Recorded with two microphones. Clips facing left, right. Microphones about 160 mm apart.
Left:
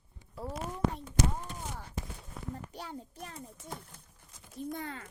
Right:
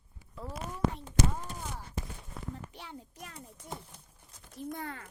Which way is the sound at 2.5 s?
40° left (ahead or behind).